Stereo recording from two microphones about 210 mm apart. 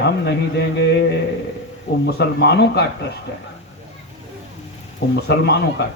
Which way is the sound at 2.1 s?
50° left (ahead or behind).